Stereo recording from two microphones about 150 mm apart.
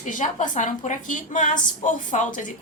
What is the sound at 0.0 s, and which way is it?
A woman's voice, 60° left (ahead or behind).